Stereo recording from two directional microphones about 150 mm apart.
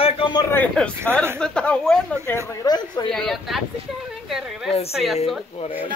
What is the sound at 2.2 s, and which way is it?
Speech, 20° left (ahead or behind).